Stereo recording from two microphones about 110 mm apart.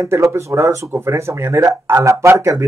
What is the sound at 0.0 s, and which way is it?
Speech, 25° right (ahead or behind).